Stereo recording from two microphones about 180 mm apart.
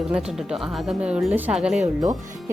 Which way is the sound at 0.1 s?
5° right (ahead or behind).